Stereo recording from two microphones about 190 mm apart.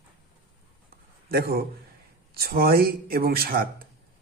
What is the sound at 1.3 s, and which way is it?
Speech, 50° right (ahead or behind).